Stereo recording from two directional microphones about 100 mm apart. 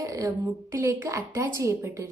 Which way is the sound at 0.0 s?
35° right (ahead or behind).